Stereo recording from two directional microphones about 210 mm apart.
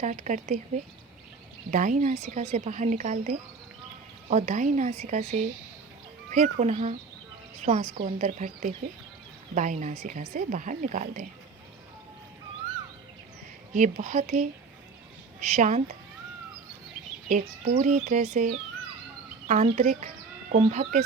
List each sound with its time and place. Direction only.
0.0 s speech: 35° right (ahead or behind)
1.7 s speech: 35° right (ahead or behind)
13.7 s speech: 35° right (ahead or behind)
17.2 s speech: 35° right (ahead or behind)